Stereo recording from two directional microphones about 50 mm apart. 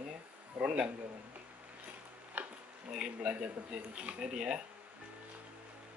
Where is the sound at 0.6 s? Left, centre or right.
Right.